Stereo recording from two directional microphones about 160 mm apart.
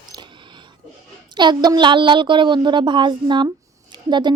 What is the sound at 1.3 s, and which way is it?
Speech, 25° right (ahead or behind).